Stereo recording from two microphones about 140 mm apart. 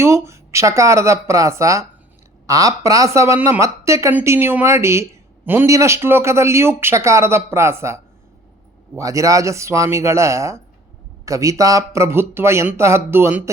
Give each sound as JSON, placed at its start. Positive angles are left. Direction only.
{"t": 0.0, "sound": "speech", "side_deg": -20}